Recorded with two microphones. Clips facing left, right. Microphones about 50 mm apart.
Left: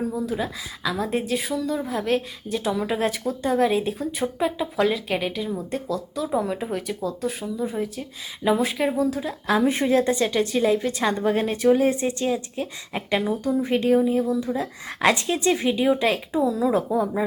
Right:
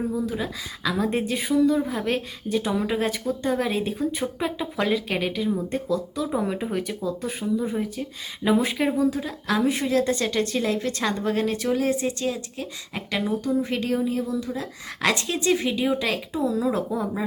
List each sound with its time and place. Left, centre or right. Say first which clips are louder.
0.2 s a woman's voice: left 1 dB; centre
9.6 s speech: left 2 dB; left
10.2 s a woman's voice: left 3 dB; centre
16.5 s a woman's voice: left 1 dB; centre